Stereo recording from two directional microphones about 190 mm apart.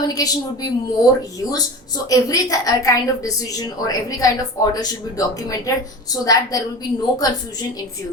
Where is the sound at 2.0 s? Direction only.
20° left (ahead or behind).